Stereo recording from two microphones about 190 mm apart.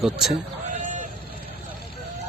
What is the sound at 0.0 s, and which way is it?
Speech, centre (ahead or behind).